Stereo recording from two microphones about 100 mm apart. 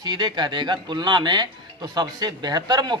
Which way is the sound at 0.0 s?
45° right (ahead or behind).